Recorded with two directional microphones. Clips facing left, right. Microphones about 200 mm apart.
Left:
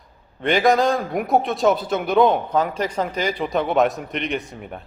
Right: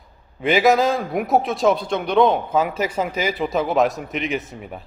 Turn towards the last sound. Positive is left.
turn(degrees=0)  # may be behind; listen again after turning